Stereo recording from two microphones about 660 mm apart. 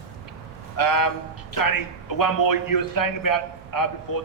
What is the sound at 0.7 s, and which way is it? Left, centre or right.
A man's voice, left.